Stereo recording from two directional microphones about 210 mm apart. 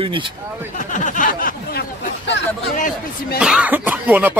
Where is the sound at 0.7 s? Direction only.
40° left (ahead or behind).